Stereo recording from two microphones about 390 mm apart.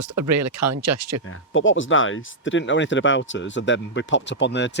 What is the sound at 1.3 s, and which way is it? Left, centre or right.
Speech, left.